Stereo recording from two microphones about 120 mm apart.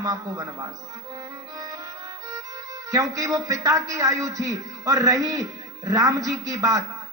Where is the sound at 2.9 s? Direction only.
30° right (ahead or behind).